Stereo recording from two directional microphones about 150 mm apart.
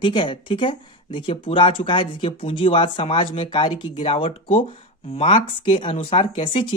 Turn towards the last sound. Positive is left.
turn(degrees=35)  # may be behind; listen again after turning